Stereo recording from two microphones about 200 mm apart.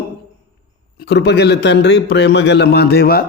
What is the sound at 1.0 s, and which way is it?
A man's voice, 60° left (ahead or behind).